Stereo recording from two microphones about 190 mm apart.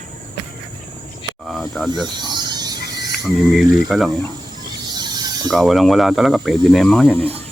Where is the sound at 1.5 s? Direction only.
Centre (ahead or behind).